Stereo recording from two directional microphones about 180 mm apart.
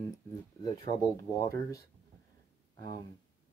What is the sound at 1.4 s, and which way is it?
Speech, 20° left (ahead or behind).